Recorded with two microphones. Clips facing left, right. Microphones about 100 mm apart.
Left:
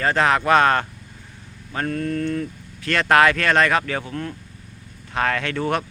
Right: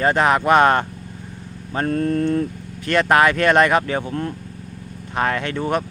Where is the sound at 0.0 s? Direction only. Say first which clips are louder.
Right 2 dB; 15° right (ahead or behind).